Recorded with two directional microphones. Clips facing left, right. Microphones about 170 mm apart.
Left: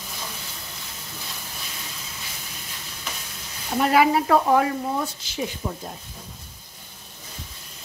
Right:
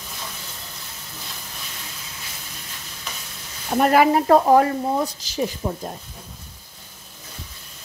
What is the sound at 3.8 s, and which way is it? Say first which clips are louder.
Speech: right 3 dB; 45° right (ahead or behind).